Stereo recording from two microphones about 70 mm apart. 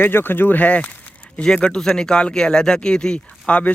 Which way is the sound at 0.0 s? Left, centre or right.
Left.